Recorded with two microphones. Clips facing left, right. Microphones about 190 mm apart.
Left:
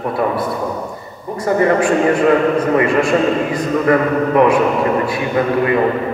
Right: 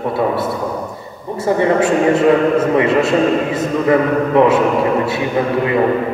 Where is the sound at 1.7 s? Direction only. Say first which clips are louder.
Right 1 dB; 25° right (ahead or behind).